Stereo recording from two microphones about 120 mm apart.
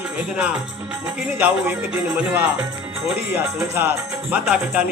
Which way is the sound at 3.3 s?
20° right (ahead or behind).